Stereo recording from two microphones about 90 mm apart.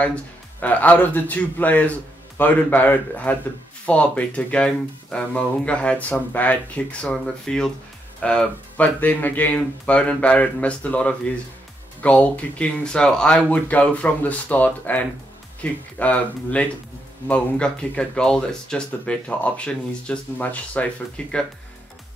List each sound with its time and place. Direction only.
0.0 s speech: 15° left (ahead or behind)